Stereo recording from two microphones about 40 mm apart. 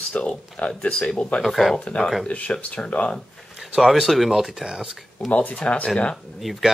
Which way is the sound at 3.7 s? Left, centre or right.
Centre.